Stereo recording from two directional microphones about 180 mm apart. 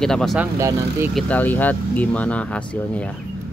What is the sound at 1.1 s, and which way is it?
Speech, 10° left (ahead or behind).